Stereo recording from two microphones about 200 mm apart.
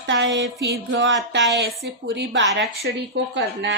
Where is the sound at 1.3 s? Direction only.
55° right (ahead or behind).